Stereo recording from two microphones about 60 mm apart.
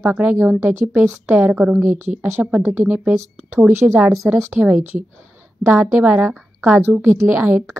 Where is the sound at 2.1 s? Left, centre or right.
Centre.